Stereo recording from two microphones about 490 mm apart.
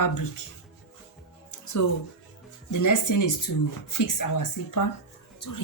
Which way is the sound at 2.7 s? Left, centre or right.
Left.